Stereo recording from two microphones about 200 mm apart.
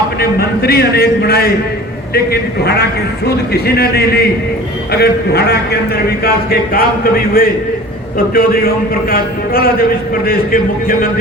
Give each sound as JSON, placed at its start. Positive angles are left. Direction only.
{"t": 0.2, "sound": "a man's voice", "side_deg": 50}